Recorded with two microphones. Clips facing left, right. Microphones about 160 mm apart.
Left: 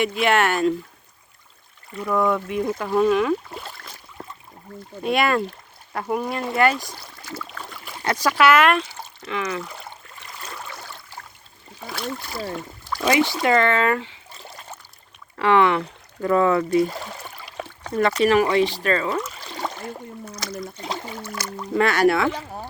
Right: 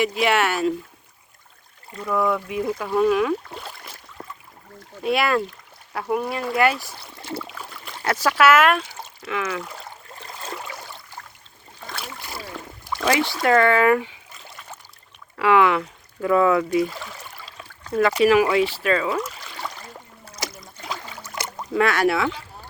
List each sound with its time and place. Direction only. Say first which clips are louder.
0.0 s speech: left 1 dB; centre (ahead or behind)
2.1 s speech: left 1 dB; centre (ahead or behind)
5.0 s speech: even; 5° right (ahead or behind)
7.2 s boat: right 4 dB; 30° right (ahead or behind)
7.4 s rowboat: even; 5° right (ahead or behind)
9.2 s speech: even; 5° right (ahead or behind)
10.2 s a sound: right 5 dB; 30° right (ahead or behind)
11.9 s speech: left 6 dB; 5° right (ahead or behind)
15.4 s speech: even; 5° right (ahead or behind)
17.9 s speech: right 1 dB; 5° right (ahead or behind)
19.5 s a sound: left 5 dB; 45° left (ahead or behind)
21.3 s a sound: right 2 dB; 25° right (ahead or behind)
21.8 s speech: left 2 dB; centre (ahead or behind)